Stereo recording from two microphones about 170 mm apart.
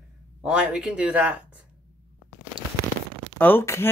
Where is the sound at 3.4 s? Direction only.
15° left (ahead or behind).